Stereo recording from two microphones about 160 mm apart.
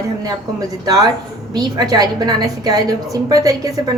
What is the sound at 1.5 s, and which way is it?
A woman's voice, 25° right (ahead or behind).